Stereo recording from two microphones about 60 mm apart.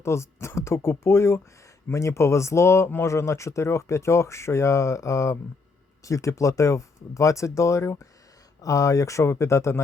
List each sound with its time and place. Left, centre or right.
0.0 s speech: left
8.6 s speech: left